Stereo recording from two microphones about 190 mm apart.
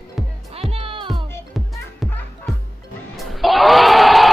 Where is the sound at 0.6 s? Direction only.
30° right (ahead or behind).